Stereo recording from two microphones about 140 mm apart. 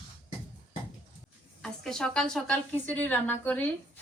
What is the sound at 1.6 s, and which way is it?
A woman's voice, 5° left (ahead or behind).